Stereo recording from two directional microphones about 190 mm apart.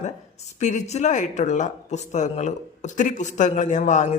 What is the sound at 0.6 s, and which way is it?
Speech, 35° left (ahead or behind).